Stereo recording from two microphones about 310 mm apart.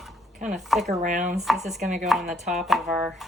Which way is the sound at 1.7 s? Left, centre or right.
Right.